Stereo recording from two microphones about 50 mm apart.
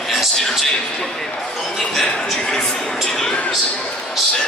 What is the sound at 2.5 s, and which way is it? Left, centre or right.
Speech, centre.